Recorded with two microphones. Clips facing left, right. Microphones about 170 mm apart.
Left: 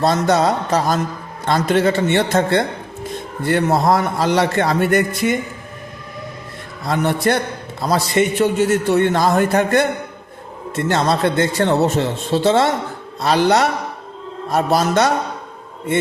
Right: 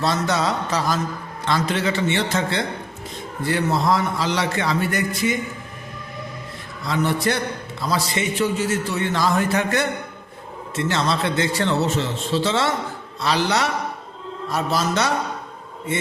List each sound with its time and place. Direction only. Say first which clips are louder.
0.0 s a man's voice: left 6 dB; 50° left (ahead or behind)
6.8 s a man's voice: left 4 dB; 55° left (ahead or behind)